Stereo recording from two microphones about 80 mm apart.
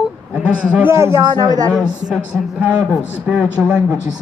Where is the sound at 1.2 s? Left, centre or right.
Right.